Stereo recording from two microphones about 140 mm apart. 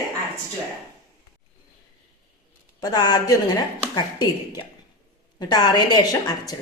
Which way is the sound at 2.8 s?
30° left (ahead or behind).